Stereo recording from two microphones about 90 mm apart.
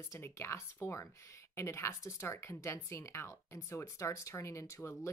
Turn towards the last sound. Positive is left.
turn(degrees=35)  # may be behind; listen again after turning